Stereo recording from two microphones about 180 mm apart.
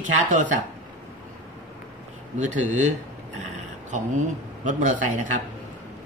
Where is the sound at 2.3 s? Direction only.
45° right (ahead or behind).